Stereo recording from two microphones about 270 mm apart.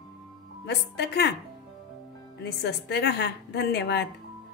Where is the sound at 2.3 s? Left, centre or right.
Left.